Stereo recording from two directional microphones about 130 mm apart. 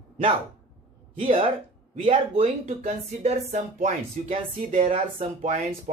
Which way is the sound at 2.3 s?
50° right (ahead or behind).